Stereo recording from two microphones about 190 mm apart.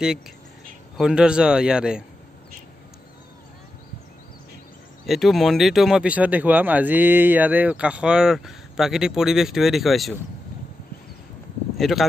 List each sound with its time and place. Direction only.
0.9 s speech: 5° right (ahead or behind)
5.0 s speech: centre (ahead or behind)
11.7 s speech: centre (ahead or behind)